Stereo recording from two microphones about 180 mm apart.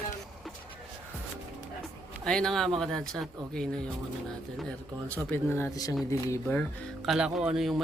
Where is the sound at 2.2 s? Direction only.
5° left (ahead or behind).